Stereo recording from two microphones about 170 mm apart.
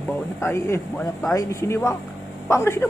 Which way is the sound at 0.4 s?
15° left (ahead or behind).